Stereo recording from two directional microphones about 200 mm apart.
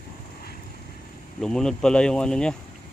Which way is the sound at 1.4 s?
5° left (ahead or behind).